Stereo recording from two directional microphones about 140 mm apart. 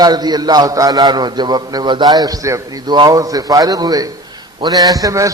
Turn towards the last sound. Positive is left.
turn(degrees=-25)  # may be behind; listen again after turning